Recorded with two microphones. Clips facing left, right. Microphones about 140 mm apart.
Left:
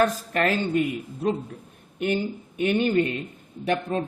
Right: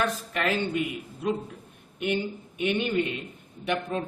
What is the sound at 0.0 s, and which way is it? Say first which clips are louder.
Speech: left 5 dB; 45° left (ahead or behind).